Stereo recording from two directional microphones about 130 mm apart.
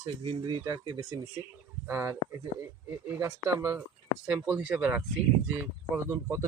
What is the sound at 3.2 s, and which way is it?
Speech, 30° right (ahead or behind).